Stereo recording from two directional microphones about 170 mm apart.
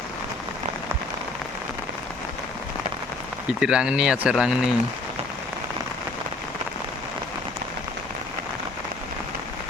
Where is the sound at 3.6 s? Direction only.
5° right (ahead or behind).